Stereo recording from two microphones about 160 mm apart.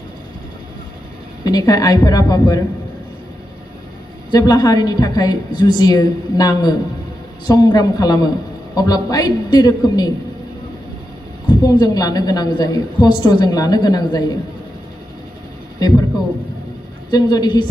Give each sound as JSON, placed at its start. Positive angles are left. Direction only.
{"t": 1.4, "sound": "a woman's voice", "side_deg": 25}
{"t": 4.3, "sound": "a woman's voice", "side_deg": 25}
{"t": 11.6, "sound": "a woman's voice", "side_deg": 25}
{"t": 17.1, "sound": "a woman's voice", "side_deg": 25}